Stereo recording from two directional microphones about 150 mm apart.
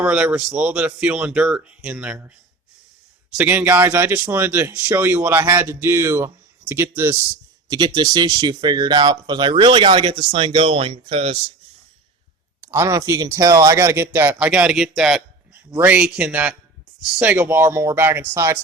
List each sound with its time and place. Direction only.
0.0 s speech: 5° right (ahead or behind)
3.3 s speech: 10° right (ahead or behind)
7.7 s speech: 30° right (ahead or behind)
12.6 s speech: 15° right (ahead or behind)